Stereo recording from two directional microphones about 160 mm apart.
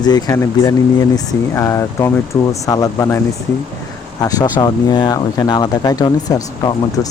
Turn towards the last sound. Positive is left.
turn(degrees=25)  # may be behind; listen again after turning